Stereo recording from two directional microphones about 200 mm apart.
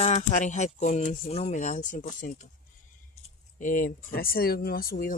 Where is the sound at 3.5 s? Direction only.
45° left (ahead or behind).